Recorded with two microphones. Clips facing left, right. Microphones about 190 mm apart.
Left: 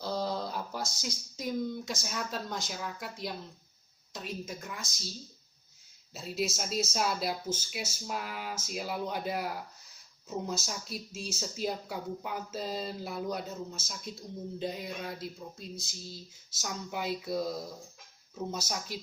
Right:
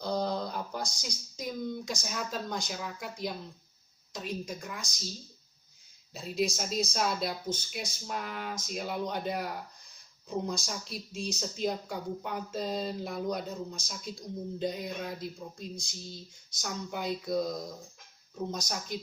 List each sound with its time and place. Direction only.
0.0 s speech: 5° left (ahead or behind)
6.1 s speech: centre (ahead or behind)